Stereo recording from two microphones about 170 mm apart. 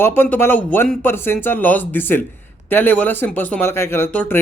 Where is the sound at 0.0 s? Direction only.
15° left (ahead or behind).